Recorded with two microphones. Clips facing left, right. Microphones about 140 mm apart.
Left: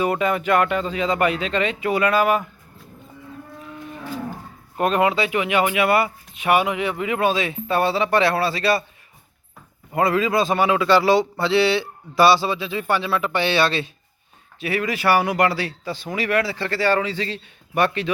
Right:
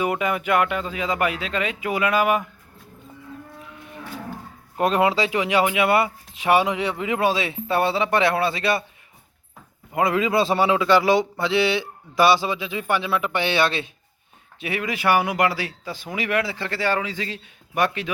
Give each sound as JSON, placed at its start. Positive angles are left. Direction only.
{"t": 0.0, "sound": "speech", "side_deg": -10}
{"t": 4.8, "sound": "speech", "side_deg": -20}
{"t": 9.9, "sound": "speech", "side_deg": -20}